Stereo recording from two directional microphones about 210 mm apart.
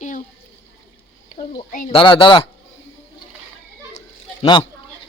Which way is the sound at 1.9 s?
25° left (ahead or behind).